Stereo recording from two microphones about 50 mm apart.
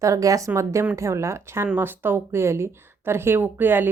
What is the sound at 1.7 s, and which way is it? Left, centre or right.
Speech, right.